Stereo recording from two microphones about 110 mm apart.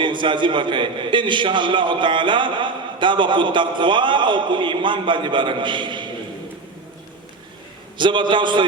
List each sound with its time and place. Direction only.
0.0 s a man's voice: 45° right (ahead or behind)
7.9 s a man's voice: 45° right (ahead or behind)